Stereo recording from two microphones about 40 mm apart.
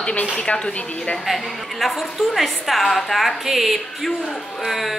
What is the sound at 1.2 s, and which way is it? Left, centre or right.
A woman's voice, centre.